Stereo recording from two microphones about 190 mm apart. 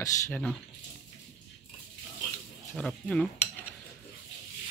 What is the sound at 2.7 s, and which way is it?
Speech, 5° left (ahead or behind).